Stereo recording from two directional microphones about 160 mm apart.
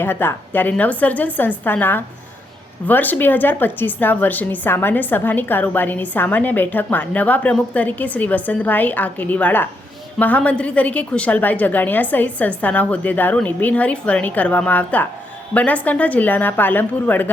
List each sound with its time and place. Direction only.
0.0 s a woman's voice: 15° left (ahead or behind)